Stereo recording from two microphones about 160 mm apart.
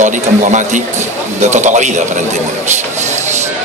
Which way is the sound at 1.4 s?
45° right (ahead or behind).